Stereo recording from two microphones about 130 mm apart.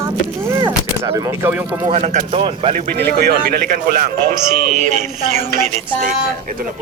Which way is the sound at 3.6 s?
90° right.